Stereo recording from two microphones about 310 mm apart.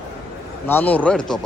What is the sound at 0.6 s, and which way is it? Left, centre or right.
Speech, centre.